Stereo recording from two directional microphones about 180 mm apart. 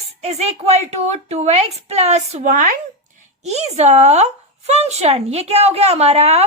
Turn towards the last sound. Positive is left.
turn(degrees=-35)  # may be behind; listen again after turning